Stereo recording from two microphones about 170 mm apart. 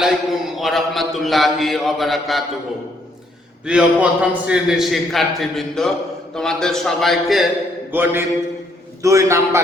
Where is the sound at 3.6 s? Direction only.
5° right (ahead or behind).